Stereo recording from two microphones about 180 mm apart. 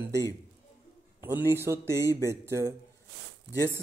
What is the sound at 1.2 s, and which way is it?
Speech, 10° right (ahead or behind).